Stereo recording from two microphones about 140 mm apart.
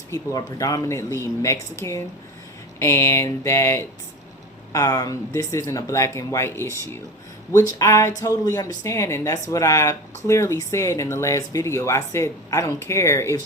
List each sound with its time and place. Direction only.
0.1 s speech: 25° left (ahead or behind)